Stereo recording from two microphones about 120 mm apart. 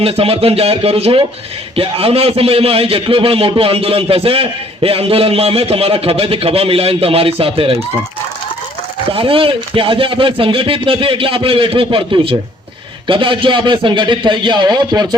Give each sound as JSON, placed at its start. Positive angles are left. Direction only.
{"t": 0.0, "sound": "a man's voice", "side_deg": -55}
{"t": 9.1, "sound": "a man's voice", "side_deg": -50}